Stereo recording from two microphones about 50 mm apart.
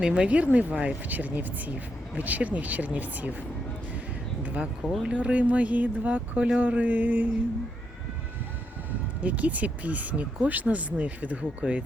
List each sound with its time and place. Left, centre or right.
0.0 s speech: centre
1.0 s speech: right
4.4 s speech: right
9.2 s speech: right